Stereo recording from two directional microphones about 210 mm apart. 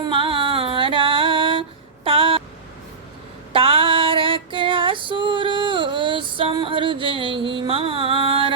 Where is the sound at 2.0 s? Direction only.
25° right (ahead or behind).